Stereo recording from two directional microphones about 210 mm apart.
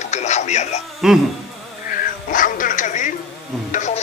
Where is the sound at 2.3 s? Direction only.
40° left (ahead or behind).